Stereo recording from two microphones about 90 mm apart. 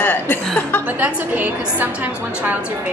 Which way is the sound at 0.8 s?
20° right (ahead or behind).